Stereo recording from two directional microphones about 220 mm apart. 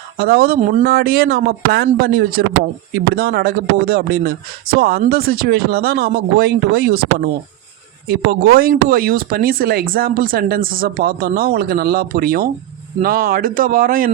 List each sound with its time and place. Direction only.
0.2 s speech: 45° right (ahead or behind)
8.0 s speech: 45° right (ahead or behind)